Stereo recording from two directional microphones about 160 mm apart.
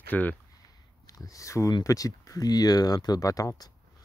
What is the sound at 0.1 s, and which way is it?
Speech, 10° left (ahead or behind).